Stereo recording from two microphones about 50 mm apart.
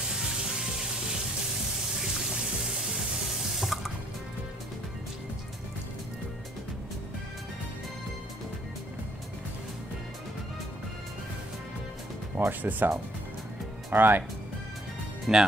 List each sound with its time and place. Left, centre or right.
0.1 s music: centre
3.5 s water: centre
12.4 s speech: right
13.9 s speech: right
15.3 s speech: centre